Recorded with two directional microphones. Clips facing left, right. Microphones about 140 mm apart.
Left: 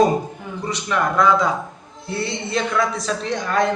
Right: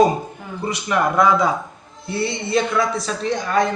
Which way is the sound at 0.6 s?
10° right (ahead or behind).